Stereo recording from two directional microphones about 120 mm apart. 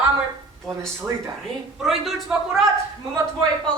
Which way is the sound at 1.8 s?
Centre (ahead or behind).